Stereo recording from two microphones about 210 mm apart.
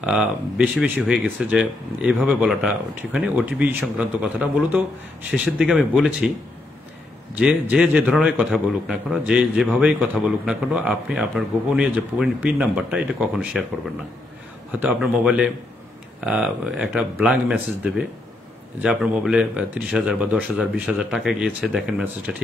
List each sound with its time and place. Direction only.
0.0 s a man's voice: 5° right (ahead or behind)
7.7 s a man's voice: 5° right (ahead or behind)
14.8 s a man's voice: 5° right (ahead or behind)